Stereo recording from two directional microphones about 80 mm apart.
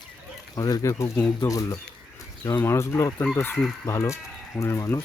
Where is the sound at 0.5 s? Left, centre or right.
Left.